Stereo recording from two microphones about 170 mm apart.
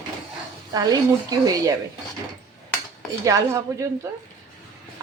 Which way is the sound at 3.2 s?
20° right (ahead or behind).